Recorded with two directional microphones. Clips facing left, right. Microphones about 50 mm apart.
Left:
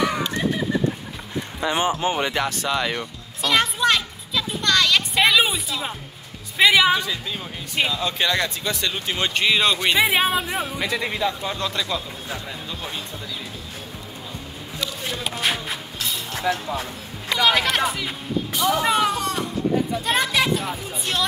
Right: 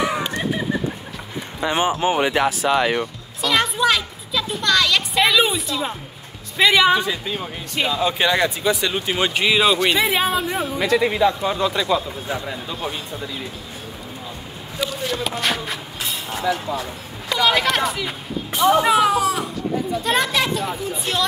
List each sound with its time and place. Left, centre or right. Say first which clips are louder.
0.0 s a sound: right 1 dB; centre
1.6 s speech: right 2 dB; right
3.3 s a sound: right 1 dB; centre
6.5 s speech: right 1 dB; centre
7.0 s speech: right 4 dB; right; by 9.8 s centre
9.9 s speech: even; centre
12.3 s speech: right 6 dB; right
15.0 s speech: right 1 dB; centre
16.5 s speech: right 1 dB; left
17.4 s speech: right 1 dB; centre
18.5 s speech: right 6 dB; right
18.9 s speech: right 4 dB; centre